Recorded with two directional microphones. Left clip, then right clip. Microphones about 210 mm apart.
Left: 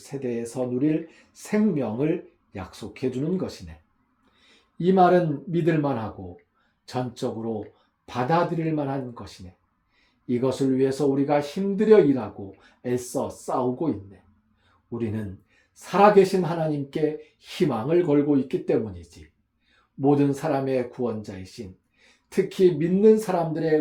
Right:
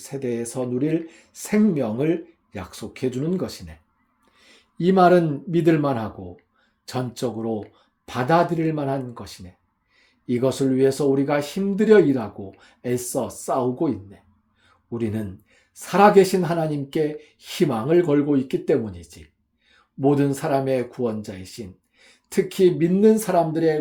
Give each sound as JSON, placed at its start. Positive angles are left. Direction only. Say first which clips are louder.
{"t": 0.0, "sound": "speech", "louder": "right 3 dB", "side_deg": -45}
{"t": 4.8, "sound": "speech", "louder": "right 2 dB", "side_deg": -45}